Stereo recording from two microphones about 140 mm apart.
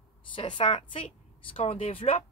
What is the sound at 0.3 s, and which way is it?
A woman's voice, 40° left (ahead or behind).